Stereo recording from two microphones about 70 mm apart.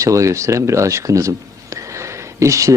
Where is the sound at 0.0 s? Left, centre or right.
Right.